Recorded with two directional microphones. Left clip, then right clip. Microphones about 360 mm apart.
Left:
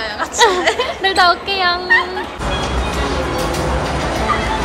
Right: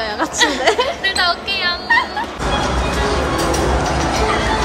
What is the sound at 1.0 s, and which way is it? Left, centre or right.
Speech, centre.